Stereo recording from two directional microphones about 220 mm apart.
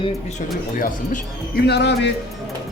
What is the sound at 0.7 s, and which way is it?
Speech, 40° left (ahead or behind).